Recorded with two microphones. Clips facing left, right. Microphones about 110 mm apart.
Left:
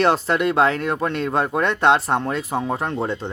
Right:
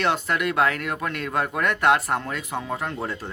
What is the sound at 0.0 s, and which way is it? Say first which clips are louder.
Speech: left 5 dB; 35° left (ahead or behind).